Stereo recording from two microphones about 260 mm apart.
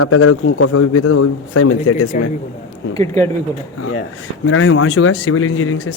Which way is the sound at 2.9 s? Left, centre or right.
Centre.